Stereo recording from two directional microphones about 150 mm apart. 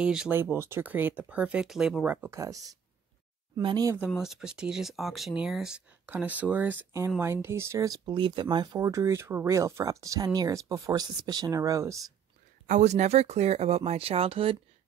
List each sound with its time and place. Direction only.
0.0 s speech: 5° right (ahead or behind)
0.4 s speech: 15° right (ahead or behind)
4.0 s speech: centre (ahead or behind); by 12.1 s 20° right (ahead or behind)
12.6 s speech: 50° right (ahead or behind)